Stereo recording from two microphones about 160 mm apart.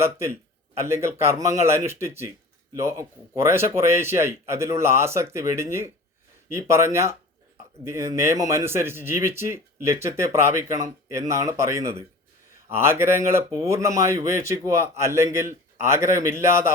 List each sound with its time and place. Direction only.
0.0 s a man's voice: 15° right (ahead or behind)